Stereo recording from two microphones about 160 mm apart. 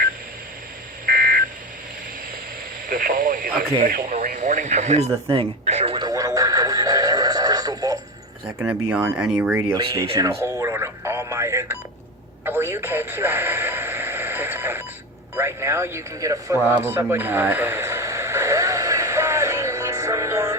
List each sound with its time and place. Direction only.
1.0 s a sound: 60° right (ahead or behind)
2.9 s speech: 60° right (ahead or behind)
4.4 s speech: 50° right (ahead or behind)
6.1 s neigh: 20° right (ahead or behind)
8.5 s speech: 15° right (ahead or behind)
9.7 s speech: 20° right (ahead or behind)
10.2 s a sound: 15° right (ahead or behind)
12.5 s radio: 15° right (ahead or behind)
15.4 s a sound: 15° right (ahead or behind)